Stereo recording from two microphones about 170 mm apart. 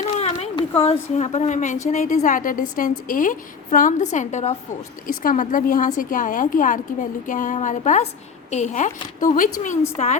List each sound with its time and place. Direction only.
0.2 s a woman's voice: 35° left (ahead or behind)